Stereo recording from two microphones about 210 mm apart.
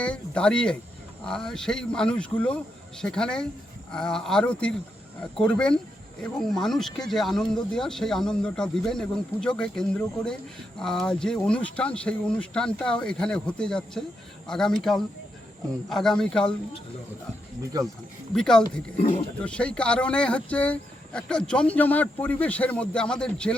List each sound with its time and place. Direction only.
0.0 s speech: 5° left (ahead or behind)
15.9 s speech: centre (ahead or behind)
18.3 s speech: 5° left (ahead or behind)
18.9 s speech: 30° left (ahead or behind)
19.4 s speech: 5° left (ahead or behind)